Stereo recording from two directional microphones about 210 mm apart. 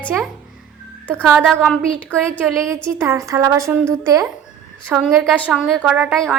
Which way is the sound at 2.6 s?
15° right (ahead or behind).